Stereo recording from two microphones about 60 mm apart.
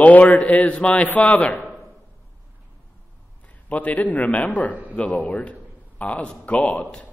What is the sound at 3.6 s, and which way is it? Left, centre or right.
A man's voice, left.